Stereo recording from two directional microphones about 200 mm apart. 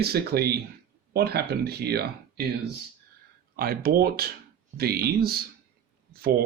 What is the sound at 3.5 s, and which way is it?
Speech, 50° right (ahead or behind).